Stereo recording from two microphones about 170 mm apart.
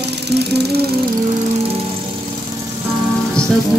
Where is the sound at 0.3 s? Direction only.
75° right (ahead or behind).